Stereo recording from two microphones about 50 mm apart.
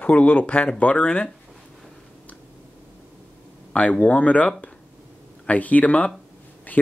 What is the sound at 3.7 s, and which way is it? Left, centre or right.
Speech, left.